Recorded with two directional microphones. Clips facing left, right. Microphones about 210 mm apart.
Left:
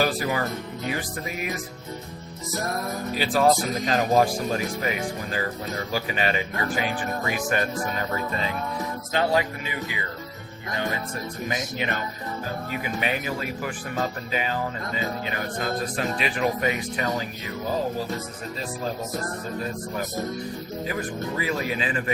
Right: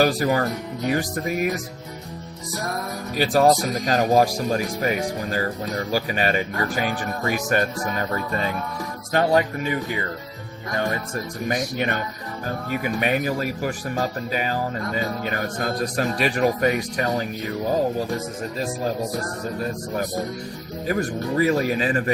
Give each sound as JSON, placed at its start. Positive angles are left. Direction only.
{"t": 0.0, "sound": "speech", "side_deg": -45}
{"t": 3.2, "sound": "speech", "side_deg": -40}
{"t": 9.1, "sound": "speech", "side_deg": -45}
{"t": 11.4, "sound": "speech", "side_deg": -45}
{"t": 20.8, "sound": "speech", "side_deg": -45}